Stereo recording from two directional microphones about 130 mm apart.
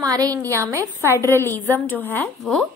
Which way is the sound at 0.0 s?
30° right (ahead or behind).